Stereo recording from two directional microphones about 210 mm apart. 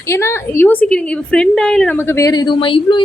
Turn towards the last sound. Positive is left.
turn(degrees=25)  # may be behind; listen again after turning